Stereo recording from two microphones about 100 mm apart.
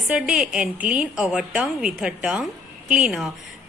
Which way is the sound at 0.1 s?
10° right (ahead or behind).